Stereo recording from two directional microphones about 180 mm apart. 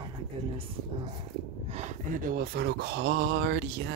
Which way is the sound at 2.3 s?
60° right (ahead or behind).